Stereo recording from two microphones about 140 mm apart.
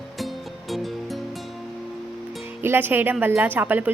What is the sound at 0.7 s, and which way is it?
Music, centre (ahead or behind).